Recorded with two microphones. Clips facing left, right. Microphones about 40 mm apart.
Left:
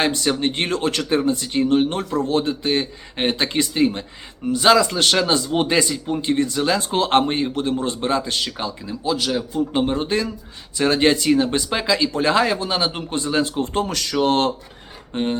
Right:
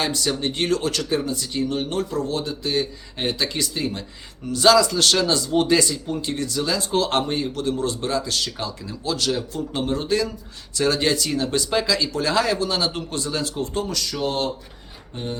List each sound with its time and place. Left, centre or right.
0.0 s speech: left
13.7 s speech: left
15.1 s a sound: left